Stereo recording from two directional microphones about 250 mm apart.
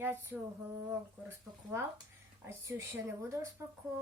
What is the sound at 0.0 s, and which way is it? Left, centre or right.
Speech, centre.